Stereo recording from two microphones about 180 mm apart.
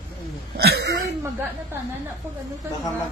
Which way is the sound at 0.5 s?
65° right (ahead or behind).